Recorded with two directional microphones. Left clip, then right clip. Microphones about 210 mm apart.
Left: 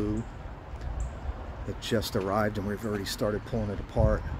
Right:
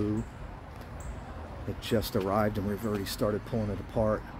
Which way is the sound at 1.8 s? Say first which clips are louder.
Even; centre (ahead or behind).